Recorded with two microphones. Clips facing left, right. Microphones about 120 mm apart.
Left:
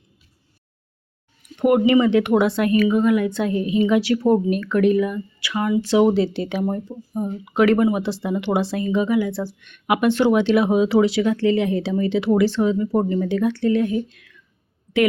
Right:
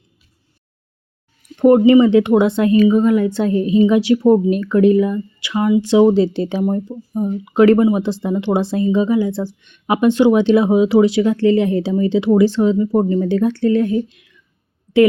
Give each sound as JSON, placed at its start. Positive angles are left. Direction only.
{"t": 1.6, "sound": "a woman's voice", "side_deg": -30}
{"t": 7.5, "sound": "a woman's voice", "side_deg": -25}
{"t": 13.1, "sound": "speech", "side_deg": -30}
{"t": 14.1, "sound": "whispering", "side_deg": -20}